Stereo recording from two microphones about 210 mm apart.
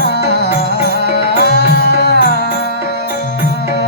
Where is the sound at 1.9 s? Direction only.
50° left (ahead or behind).